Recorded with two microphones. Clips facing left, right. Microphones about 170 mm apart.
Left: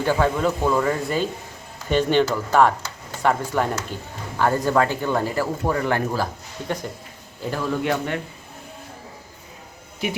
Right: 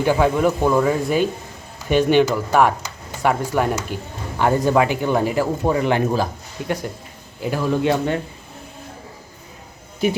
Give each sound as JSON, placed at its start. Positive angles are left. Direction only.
{"t": 0.0, "sound": "speech", "side_deg": -10}